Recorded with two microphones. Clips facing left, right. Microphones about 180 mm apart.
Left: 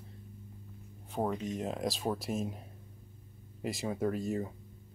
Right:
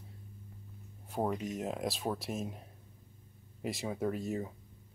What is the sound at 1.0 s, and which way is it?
Speech, 10° right (ahead or behind).